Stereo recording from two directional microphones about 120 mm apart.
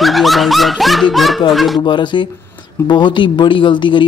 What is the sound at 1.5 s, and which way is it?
Speech, centre (ahead or behind).